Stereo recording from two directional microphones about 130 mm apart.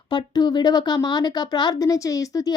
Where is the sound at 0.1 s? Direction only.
35° left (ahead or behind).